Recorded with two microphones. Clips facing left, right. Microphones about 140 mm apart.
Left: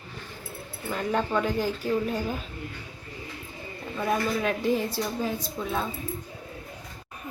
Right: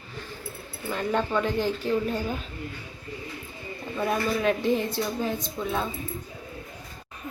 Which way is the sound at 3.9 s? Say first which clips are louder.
Even; centre (ahead or behind).